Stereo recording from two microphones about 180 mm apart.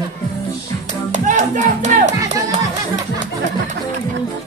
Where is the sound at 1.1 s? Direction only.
45° right (ahead or behind).